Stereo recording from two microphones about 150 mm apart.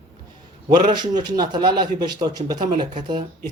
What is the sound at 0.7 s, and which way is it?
A man's voice, 30° right (ahead or behind).